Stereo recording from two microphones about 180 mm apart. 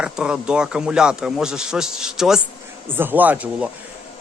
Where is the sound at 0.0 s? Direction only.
5° right (ahead or behind).